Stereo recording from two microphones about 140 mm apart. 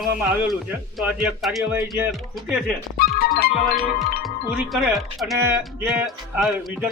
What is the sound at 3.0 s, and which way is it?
Music, 90° left.